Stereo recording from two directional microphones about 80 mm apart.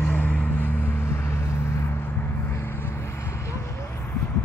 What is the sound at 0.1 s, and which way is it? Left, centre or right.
Vehicle, left.